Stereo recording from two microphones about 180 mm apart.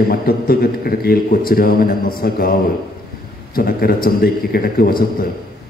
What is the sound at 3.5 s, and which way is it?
A man's voice, 55° left (ahead or behind).